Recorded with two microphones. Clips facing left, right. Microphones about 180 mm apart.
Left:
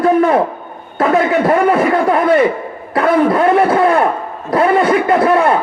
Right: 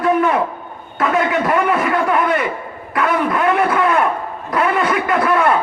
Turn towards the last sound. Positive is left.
turn(degrees=25)  # may be behind; listen again after turning